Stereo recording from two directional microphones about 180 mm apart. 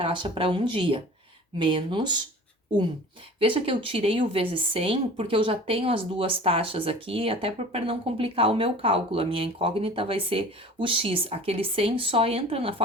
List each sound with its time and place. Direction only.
0.0 s speech: 30° right (ahead or behind)
3.5 s speech: 30° right (ahead or behind)